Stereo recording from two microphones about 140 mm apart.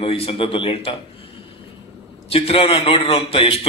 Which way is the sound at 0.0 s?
45° left (ahead or behind).